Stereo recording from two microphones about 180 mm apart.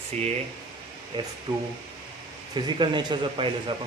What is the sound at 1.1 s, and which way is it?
Speech, 25° right (ahead or behind).